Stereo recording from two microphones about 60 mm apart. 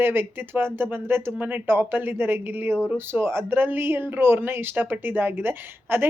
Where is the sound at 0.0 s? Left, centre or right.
Right.